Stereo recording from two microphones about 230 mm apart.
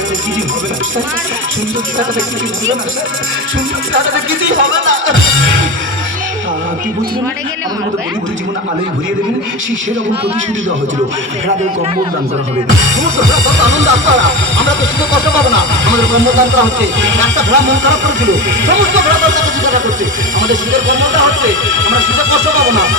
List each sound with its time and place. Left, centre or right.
3.9 s speech: right
13.7 s speech: right